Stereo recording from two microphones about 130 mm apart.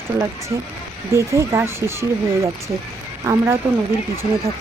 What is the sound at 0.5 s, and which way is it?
Speech, 30° right (ahead or behind).